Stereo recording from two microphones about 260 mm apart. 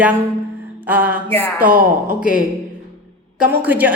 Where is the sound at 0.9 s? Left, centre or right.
Centre.